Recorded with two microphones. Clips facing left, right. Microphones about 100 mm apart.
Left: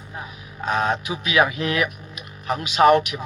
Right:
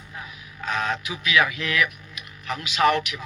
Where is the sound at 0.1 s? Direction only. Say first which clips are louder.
Left 4 dB; 35° left (ahead or behind).